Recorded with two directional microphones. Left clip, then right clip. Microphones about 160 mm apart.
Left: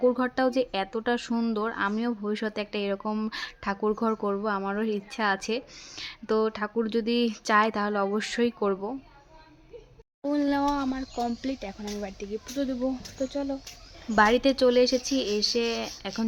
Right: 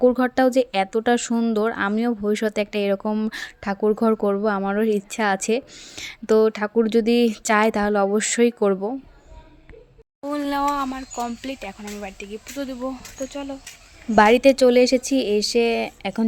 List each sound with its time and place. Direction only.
0.0 s speech: 40° right (ahead or behind)
10.2 s speech: centre (ahead or behind)
14.2 s speech: 40° right (ahead or behind)